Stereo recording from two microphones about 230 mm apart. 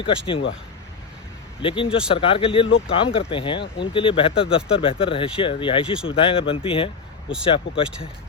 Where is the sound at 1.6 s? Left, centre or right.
Left.